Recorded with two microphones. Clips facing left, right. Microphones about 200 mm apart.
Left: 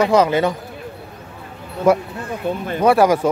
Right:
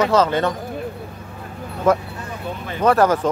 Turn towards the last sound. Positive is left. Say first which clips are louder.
# left 2 dB
turn(degrees=10)  # may be behind; listen again after turning